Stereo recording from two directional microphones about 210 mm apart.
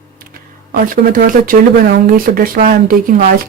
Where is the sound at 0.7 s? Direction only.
40° right (ahead or behind).